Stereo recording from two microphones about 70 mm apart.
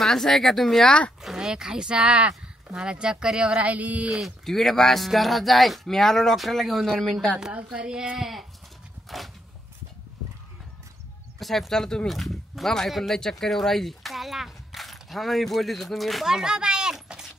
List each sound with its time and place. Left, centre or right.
0.0 s speech: centre
0.8 s speech: centre
1.2 s speech: centre
4.1 s speech: centre
7.5 s speech: centre
9.1 s speech: centre
11.3 s speech: centre